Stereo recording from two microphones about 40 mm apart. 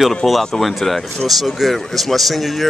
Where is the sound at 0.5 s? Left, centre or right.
Centre.